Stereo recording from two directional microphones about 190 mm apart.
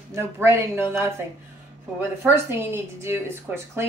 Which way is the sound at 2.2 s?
10° right (ahead or behind).